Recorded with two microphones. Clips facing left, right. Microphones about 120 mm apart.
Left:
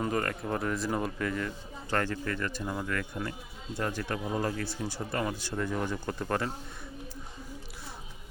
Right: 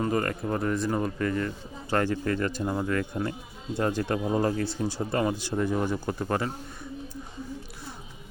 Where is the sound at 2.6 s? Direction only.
30° right (ahead or behind); by 6.5 s 5° right (ahead or behind).